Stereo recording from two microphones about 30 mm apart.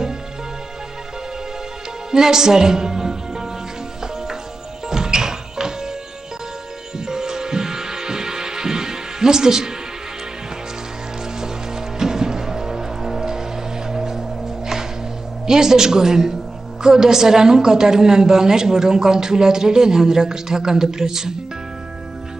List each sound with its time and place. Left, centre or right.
2.0 s music: centre
4.8 s music: right
7.1 s music: right
11.4 s music: centre
15.4 s a woman's voice: right